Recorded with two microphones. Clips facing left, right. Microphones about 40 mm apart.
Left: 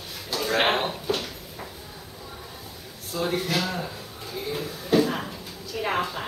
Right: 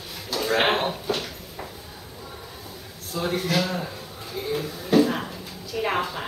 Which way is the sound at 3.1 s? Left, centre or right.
Centre.